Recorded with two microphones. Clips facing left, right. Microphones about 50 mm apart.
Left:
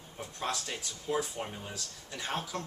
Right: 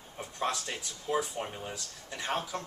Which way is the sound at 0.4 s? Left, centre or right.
Centre.